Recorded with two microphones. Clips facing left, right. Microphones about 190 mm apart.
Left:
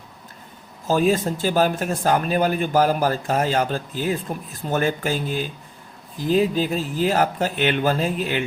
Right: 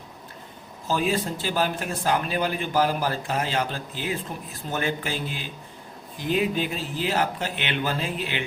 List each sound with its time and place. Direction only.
0.9 s speech: 45° left (ahead or behind)